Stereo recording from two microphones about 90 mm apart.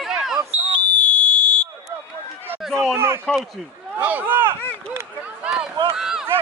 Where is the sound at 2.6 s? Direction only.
Centre (ahead or behind).